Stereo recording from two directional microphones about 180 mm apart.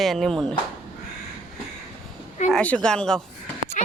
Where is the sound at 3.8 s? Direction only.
45° left (ahead or behind).